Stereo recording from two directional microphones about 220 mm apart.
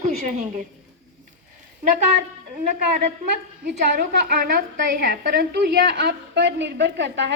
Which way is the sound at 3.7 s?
40° right (ahead or behind).